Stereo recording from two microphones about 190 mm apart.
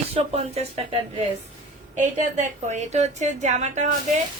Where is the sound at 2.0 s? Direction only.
40° right (ahead or behind).